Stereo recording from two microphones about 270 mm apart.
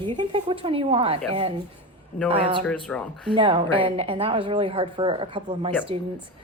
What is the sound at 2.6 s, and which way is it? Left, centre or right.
Speech, centre.